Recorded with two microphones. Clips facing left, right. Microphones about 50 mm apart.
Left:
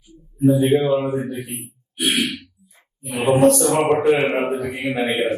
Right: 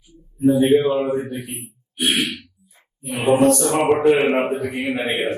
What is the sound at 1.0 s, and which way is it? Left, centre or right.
A man's voice, right.